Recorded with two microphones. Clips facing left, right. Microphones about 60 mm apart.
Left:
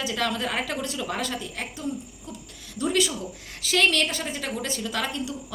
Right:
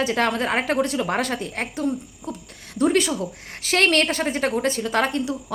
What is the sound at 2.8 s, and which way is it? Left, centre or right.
A woman's voice, right.